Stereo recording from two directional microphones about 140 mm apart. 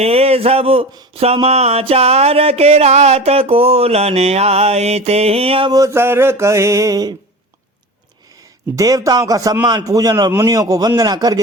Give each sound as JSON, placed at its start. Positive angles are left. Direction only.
{"t": 0.0, "sound": "a sound", "side_deg": -45}
{"t": 5.7, "sound": "a man's voice", "side_deg": -20}
{"t": 8.7, "sound": "a man's voice", "side_deg": -25}